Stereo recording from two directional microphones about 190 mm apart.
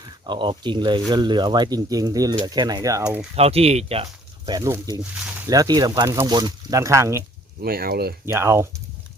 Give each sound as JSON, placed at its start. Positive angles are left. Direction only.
{"t": 0.3, "sound": "speech", "side_deg": -25}
{"t": 3.3, "sound": "speech", "side_deg": -30}
{"t": 4.4, "sound": "speech", "side_deg": -20}
{"t": 7.6, "sound": "speech", "side_deg": -50}
{"t": 8.3, "sound": "speech", "side_deg": -15}